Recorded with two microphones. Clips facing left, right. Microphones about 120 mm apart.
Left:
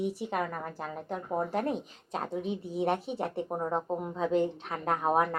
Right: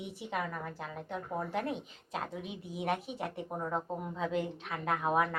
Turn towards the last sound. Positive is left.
turn(degrees=40)  # may be behind; listen again after turning